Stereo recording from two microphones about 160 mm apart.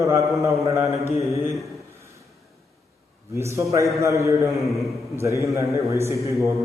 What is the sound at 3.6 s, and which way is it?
Speech, 20° right (ahead or behind).